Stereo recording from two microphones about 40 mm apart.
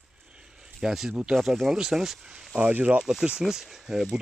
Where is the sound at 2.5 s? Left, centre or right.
Right.